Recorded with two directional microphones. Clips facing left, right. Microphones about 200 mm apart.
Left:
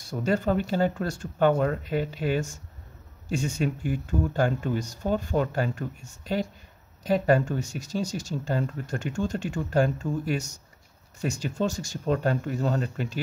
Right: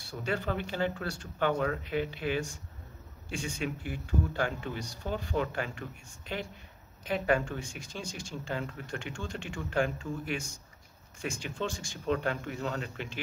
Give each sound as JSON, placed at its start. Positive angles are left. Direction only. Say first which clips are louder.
{"t": 0.0, "sound": "speech", "louder": "left 8 dB", "side_deg": 40}